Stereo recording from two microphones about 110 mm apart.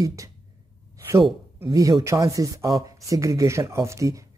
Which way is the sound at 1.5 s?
30° right (ahead or behind).